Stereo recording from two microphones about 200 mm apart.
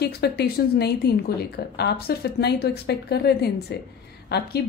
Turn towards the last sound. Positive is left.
turn(degrees=55)  # may be behind; listen again after turning